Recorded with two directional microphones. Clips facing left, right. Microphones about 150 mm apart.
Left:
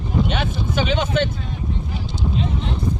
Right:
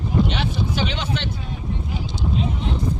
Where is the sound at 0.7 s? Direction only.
50° left (ahead or behind).